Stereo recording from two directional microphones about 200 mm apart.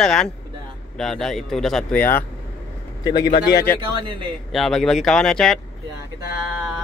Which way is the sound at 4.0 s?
25° right (ahead or behind).